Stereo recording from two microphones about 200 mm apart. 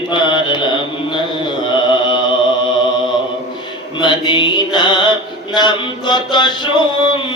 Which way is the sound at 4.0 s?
25° left (ahead or behind).